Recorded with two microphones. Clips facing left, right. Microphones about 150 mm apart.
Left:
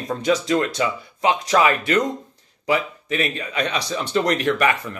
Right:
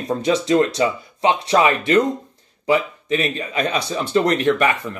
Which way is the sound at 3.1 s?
35° right (ahead or behind).